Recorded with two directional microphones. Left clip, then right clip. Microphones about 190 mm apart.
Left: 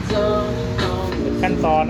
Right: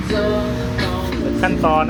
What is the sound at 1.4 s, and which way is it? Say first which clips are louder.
Vehicle: right 2 dB; 5° right (ahead or behind).